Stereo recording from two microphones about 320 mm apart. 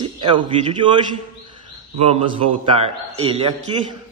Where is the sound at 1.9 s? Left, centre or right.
Centre.